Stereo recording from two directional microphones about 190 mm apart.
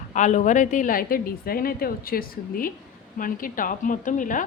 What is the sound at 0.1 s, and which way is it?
A woman's voice, 40° left (ahead or behind).